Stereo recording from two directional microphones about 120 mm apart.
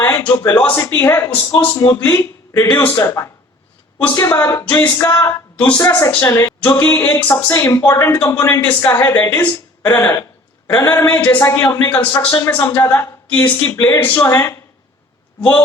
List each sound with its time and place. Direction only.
0.5 s a man's voice: 15° left (ahead or behind)